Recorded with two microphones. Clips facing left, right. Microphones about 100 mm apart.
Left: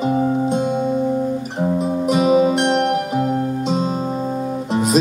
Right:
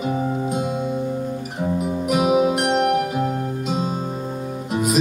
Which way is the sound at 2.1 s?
10° right (ahead or behind).